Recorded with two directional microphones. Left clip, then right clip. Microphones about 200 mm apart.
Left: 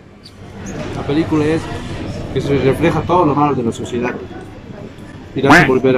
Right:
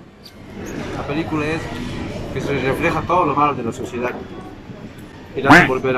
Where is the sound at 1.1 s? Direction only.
25° left (ahead or behind).